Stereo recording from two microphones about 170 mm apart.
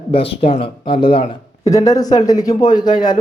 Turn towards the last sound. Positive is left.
turn(degrees=25)  # may be behind; listen again after turning